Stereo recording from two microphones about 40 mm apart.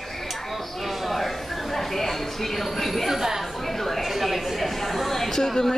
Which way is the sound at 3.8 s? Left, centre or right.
Centre.